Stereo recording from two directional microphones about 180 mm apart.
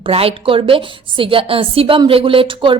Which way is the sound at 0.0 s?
30° right (ahead or behind).